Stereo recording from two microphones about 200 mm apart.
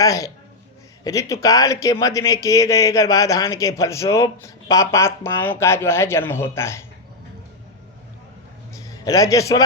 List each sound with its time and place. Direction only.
0.0 s speech: 15° left (ahead or behind)
9.0 s speech: 15° left (ahead or behind)